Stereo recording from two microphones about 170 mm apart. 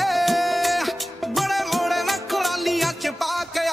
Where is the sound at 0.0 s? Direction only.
Centre (ahead or behind).